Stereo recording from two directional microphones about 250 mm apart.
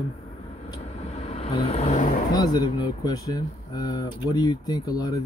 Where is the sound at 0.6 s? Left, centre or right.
Left.